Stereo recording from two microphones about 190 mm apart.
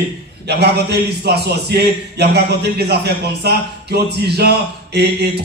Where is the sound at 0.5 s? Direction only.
60° right (ahead or behind).